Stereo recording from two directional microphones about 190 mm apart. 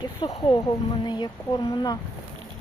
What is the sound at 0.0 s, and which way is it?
Speech, 25° left (ahead or behind).